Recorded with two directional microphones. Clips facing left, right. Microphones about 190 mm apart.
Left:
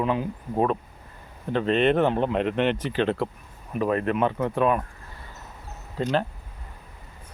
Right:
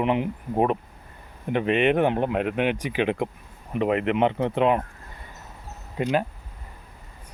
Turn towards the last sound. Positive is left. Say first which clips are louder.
# right 1 dB
turn(degrees=-15)  # may be behind; listen again after turning